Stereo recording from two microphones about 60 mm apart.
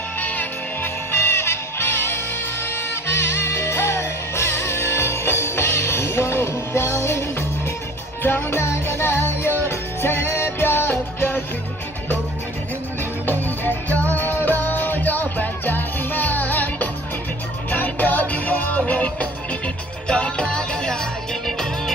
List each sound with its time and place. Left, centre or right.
0.2 s music: left
1.1 s music: left
13.3 s music: left; by 21.9 s centre